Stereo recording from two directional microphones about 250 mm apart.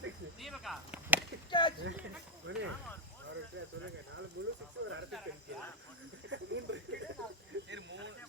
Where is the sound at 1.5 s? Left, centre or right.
Centre.